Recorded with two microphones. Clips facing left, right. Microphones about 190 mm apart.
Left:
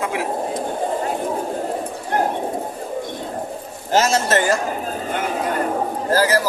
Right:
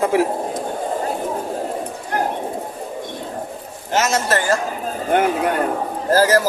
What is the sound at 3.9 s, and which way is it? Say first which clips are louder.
Speech: left 2 dB; 30° left (ahead or behind).